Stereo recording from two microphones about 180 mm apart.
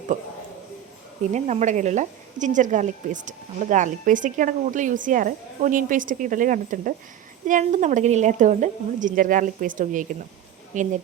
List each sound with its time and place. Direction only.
0.1 s a woman's voice: 45° right (ahead or behind)
1.3 s a woman's voice: 40° right (ahead or behind)